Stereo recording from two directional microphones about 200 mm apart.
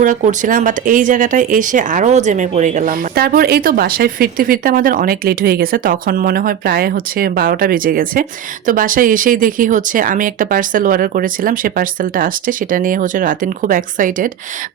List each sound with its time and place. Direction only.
0.0 s speech: 40° right (ahead or behind)